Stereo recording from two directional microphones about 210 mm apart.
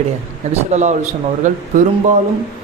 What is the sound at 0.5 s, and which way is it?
Speech, 35° right (ahead or behind).